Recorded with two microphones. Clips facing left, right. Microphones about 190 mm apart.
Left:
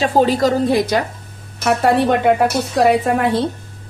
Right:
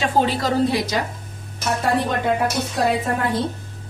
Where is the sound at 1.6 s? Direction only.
70° left (ahead or behind).